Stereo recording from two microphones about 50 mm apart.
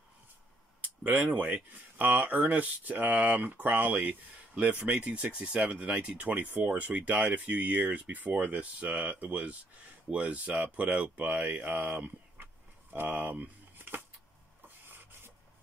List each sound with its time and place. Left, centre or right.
0.7 s a sound: right
1.2 s speech: right
14.9 s rub: right